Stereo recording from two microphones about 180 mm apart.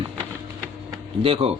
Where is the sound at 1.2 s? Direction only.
30° right (ahead or behind).